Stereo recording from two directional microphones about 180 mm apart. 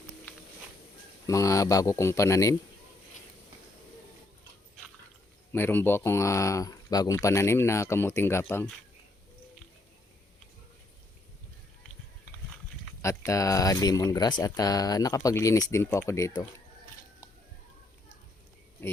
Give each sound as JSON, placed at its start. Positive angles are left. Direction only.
{"t": 1.3, "sound": "speech", "side_deg": 15}
{"t": 5.5, "sound": "speech", "side_deg": 10}
{"t": 13.0, "sound": "speech", "side_deg": 15}